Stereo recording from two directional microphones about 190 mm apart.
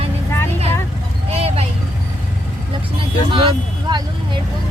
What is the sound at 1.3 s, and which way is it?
Vehicle, 30° right (ahead or behind).